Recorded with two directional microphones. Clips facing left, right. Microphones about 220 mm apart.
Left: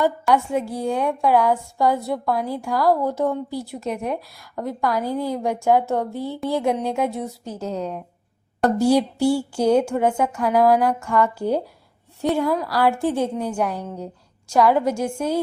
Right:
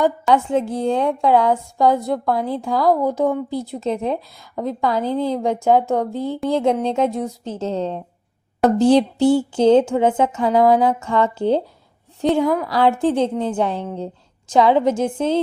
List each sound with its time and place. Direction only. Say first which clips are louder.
0.0 s speech: right 2 dB; 20° right (ahead or behind)